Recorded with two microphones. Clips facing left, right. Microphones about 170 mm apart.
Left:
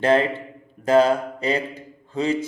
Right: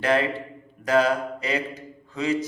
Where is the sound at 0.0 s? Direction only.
30° left (ahead or behind).